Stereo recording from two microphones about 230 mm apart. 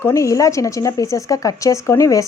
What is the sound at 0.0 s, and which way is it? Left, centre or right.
Speech, centre.